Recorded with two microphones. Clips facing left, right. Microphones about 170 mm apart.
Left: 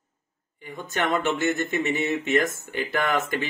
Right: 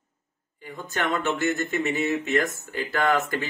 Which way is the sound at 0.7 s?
20° left (ahead or behind).